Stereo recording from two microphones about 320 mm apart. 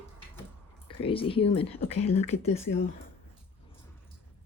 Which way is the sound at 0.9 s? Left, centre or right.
Centre.